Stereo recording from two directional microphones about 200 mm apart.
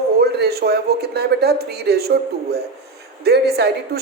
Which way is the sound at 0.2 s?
55° right (ahead or behind).